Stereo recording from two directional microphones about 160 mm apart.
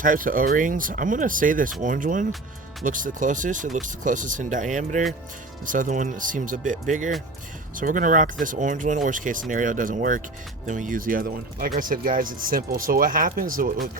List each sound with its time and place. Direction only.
0.0 s speech: 60° right (ahead or behind)